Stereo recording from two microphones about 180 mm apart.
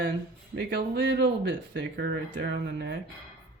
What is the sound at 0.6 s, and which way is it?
Speech, 70° right (ahead or behind).